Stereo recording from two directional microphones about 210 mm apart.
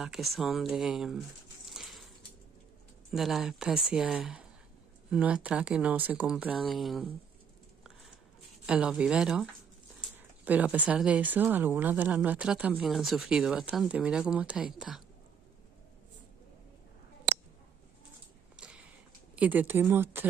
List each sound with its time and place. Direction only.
0.0 s speech: centre (ahead or behind)
1.7 s a sound: centre (ahead or behind)
3.1 s speech: centre (ahead or behind)
8.6 s speech: 5° right (ahead or behind)
18.6 s a sound: 5° right (ahead or behind)
19.3 s speech: 10° right (ahead or behind)